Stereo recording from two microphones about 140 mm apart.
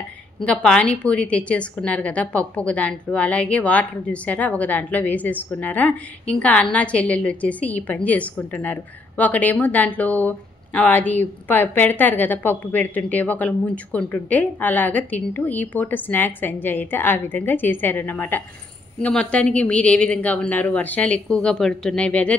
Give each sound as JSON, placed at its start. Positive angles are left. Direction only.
{"t": 0.5, "sound": "a woman's voice", "side_deg": 5}